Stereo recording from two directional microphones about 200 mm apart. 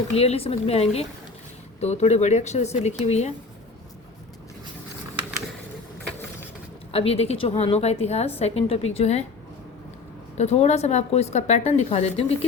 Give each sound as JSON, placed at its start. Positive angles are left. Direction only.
{"t": 0.1, "sound": "speech", "side_deg": 30}
{"t": 6.9, "sound": "speech", "side_deg": 30}
{"t": 10.3, "sound": "speech", "side_deg": 35}